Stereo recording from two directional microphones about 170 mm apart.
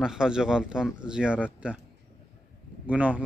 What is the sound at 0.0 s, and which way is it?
Speech, 5° right (ahead or behind).